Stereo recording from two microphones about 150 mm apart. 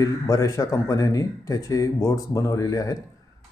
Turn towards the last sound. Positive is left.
turn(degrees=25)  # may be behind; listen again after turning